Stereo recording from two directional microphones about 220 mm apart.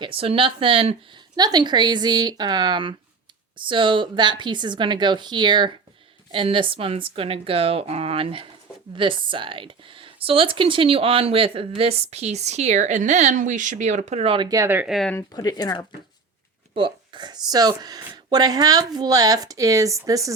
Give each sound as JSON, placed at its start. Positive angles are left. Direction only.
{"t": 0.0, "sound": "speech", "side_deg": -25}
{"t": 15.4, "sound": "speech", "side_deg": 15}
{"t": 16.7, "sound": "speech", "side_deg": -20}